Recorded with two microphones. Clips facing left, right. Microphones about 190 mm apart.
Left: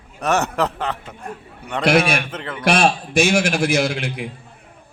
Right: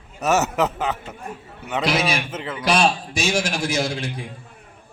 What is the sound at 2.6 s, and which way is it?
A man's voice, 55° left (ahead or behind).